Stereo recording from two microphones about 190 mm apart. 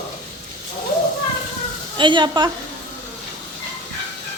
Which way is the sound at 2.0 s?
25° right (ahead or behind).